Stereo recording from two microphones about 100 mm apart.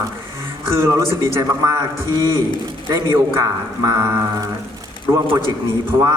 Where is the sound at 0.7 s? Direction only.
30° right (ahead or behind).